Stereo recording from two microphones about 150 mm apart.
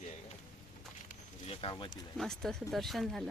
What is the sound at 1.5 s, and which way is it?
Speech, 40° left (ahead or behind).